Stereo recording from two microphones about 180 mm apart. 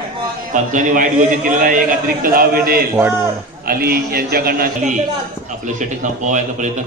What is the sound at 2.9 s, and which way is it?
Speech, 15° right (ahead or behind).